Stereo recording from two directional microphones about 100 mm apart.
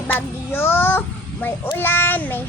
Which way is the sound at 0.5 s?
20° left (ahead or behind).